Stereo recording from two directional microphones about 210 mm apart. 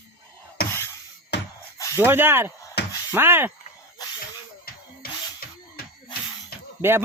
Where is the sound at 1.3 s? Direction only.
55° left (ahead or behind).